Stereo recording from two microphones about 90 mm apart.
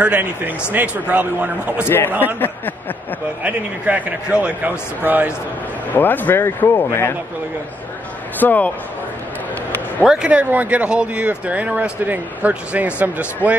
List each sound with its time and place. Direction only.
0.0 s speech: 20° right (ahead or behind)
2.4 s speech: 20° left (ahead or behind)
3.4 s speech: 15° right (ahead or behind)
5.9 s speech: 20° left (ahead or behind)
8.4 s speech: 20° left (ahead or behind)
10.0 s speech: 10° right (ahead or behind)